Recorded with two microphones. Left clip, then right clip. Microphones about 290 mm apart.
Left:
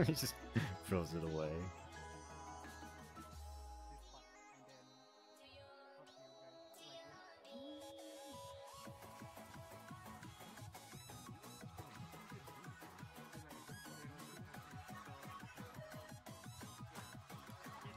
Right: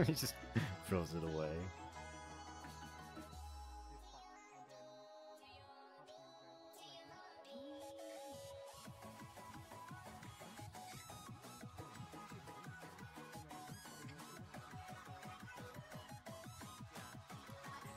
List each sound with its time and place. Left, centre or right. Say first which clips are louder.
0.0 s speech: even; centre
15.7 s music: left 1 dB; centre